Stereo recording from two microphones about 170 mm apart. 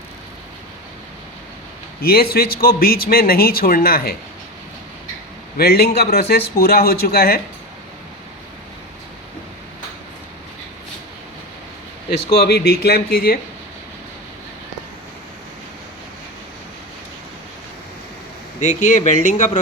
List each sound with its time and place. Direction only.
2.0 s speech: 65° left (ahead or behind)
5.5 s a man's voice: 65° left (ahead or behind)
12.3 s a man's voice: 70° left (ahead or behind)
18.6 s speech: 45° left (ahead or behind)